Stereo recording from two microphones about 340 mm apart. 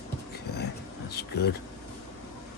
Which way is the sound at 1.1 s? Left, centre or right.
Left.